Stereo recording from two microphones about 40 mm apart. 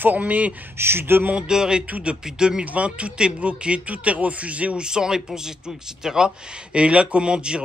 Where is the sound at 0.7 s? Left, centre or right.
Right.